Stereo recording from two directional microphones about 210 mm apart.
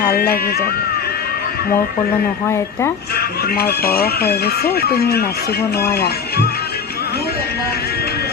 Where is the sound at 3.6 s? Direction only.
45° left (ahead or behind).